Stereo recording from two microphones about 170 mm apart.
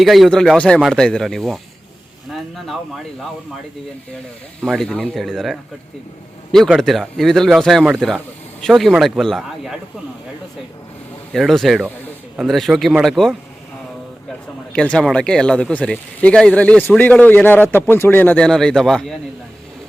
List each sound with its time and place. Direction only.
0.0 s speech: centre (ahead or behind)
4.6 s speech: centre (ahead or behind)
11.3 s speech: centre (ahead or behind)
14.7 s speech: 5° left (ahead or behind)